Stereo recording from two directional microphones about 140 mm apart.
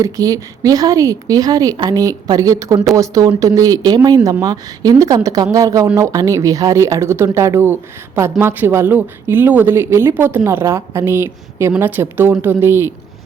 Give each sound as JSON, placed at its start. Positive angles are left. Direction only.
{"t": 0.0, "sound": "a woman's voice", "side_deg": -25}